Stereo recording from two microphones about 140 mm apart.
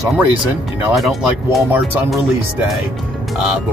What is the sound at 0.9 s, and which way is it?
Speech, centre (ahead or behind).